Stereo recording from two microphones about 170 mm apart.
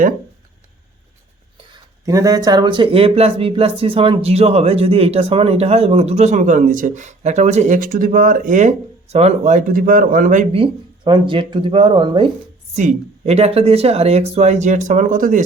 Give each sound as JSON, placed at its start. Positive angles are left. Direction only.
{"t": 2.0, "sound": "a man's voice", "side_deg": -20}
{"t": 10.5, "sound": "speech", "side_deg": -30}
{"t": 12.7, "sound": "a man's voice", "side_deg": -45}